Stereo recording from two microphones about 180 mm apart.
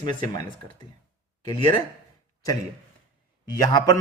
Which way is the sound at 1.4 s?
25° left (ahead or behind).